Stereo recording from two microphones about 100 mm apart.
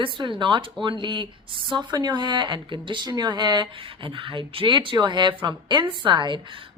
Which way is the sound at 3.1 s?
45° right (ahead or behind).